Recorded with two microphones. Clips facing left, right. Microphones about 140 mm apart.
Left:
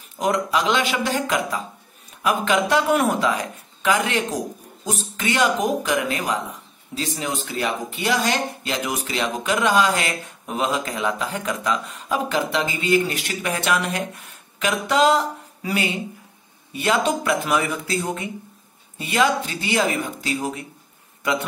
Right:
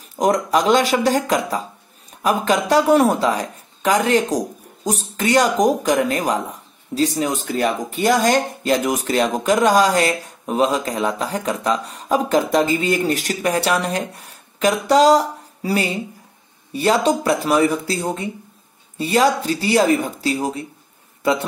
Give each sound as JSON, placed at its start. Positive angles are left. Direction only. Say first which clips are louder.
{"t": 0.1, "sound": "speech", "louder": "right 4 dB", "side_deg": -45}